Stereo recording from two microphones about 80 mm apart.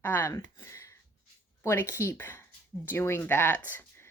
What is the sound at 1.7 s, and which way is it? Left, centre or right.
A woman's voice, left.